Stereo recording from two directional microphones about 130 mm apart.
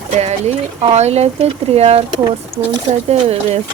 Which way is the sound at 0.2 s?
55° right (ahead or behind).